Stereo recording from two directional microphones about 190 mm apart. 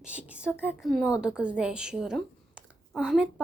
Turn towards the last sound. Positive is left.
turn(degrees=-5)  # may be behind; listen again after turning